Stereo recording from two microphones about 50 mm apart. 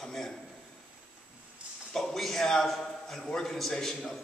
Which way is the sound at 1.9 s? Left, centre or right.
Centre.